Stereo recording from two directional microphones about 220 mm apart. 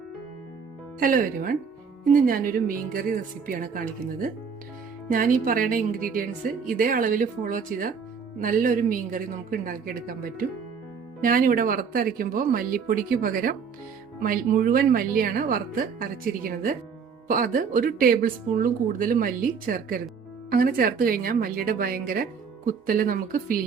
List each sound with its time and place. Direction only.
0.9 s speech: 40° right (ahead or behind)